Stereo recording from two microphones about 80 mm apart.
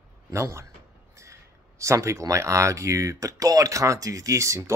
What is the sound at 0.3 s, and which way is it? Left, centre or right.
Speech, right.